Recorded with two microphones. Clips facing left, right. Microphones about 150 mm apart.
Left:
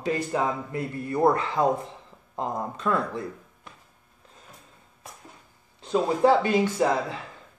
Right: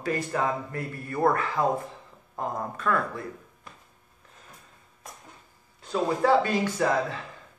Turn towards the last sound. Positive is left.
turn(degrees=20)  # may be behind; listen again after turning